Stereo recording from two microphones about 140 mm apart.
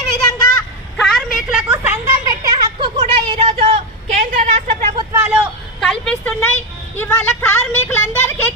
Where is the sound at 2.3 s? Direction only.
25° right (ahead or behind).